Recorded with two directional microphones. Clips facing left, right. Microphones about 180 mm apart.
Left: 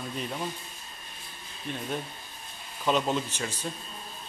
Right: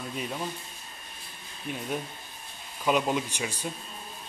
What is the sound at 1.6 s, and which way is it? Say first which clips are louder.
Speech: right 1 dB; 5° right (ahead or behind).